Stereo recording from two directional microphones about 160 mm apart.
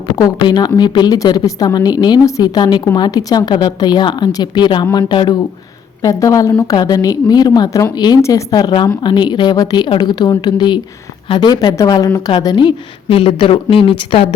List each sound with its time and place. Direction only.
0.2 s a woman's voice: 25° left (ahead or behind)